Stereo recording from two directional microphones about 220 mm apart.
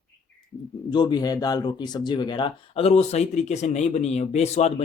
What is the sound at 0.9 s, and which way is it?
Speech, 20° left (ahead or behind).